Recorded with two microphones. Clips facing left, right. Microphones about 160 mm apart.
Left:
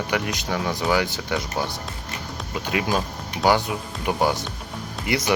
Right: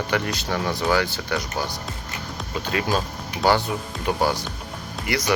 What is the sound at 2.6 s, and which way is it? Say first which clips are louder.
Speech: even; 15° left (ahead or behind).